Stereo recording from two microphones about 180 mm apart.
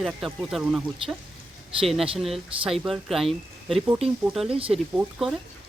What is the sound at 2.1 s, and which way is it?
Speech, centre (ahead or behind).